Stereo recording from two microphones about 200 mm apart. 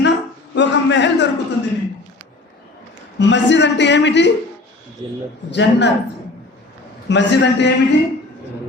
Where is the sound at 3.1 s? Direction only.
60° left (ahead or behind).